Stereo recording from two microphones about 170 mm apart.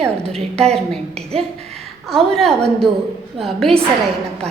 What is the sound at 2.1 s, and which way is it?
A woman's voice, centre (ahead or behind).